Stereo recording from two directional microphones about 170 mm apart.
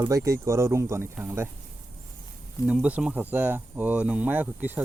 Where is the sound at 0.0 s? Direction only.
20° right (ahead or behind).